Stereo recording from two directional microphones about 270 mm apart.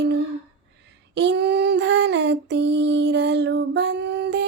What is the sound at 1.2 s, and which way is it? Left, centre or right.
Female singing, right.